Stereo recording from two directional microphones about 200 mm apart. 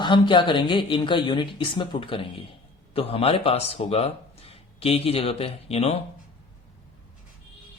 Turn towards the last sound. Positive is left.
turn(degrees=30)  # may be behind; listen again after turning